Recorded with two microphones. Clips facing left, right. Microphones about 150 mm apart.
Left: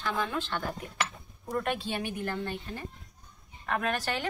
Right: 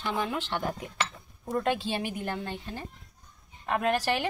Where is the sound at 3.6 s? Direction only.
20° right (ahead or behind).